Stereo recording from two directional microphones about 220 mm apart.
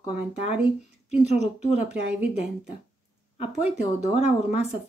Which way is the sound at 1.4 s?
30° left (ahead or behind).